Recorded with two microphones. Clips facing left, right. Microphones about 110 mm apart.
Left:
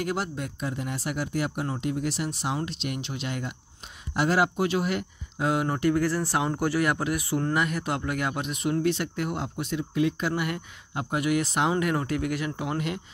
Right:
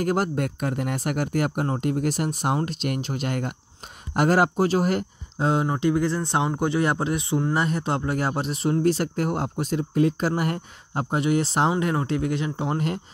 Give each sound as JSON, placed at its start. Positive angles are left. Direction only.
{"t": 0.0, "sound": "speech", "side_deg": -45}
{"t": 5.7, "sound": "speech", "side_deg": -20}